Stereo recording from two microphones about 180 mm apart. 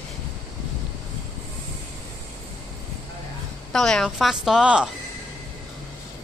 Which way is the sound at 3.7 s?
Centre (ahead or behind).